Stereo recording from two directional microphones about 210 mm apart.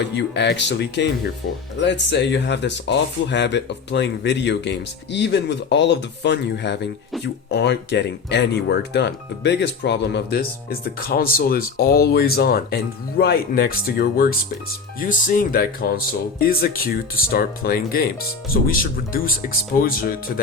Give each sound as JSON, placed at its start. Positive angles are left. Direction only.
{"t": 0.0, "sound": "speech", "side_deg": 55}